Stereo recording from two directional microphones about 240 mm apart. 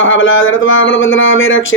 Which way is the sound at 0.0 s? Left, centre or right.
Left.